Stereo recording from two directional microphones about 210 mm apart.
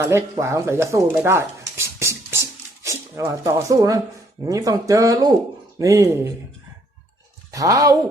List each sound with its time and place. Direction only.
0.0 s speech: 15° right (ahead or behind)
1.1 s a sound: 10° right (ahead or behind)
4.4 s speech: 15° right (ahead or behind)
7.5 s speech: 15° right (ahead or behind)